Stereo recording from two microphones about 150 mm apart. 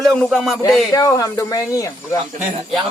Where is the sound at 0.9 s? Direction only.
25° left (ahead or behind).